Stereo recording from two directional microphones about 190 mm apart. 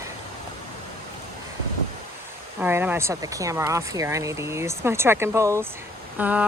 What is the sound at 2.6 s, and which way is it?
Speech, 10° right (ahead or behind).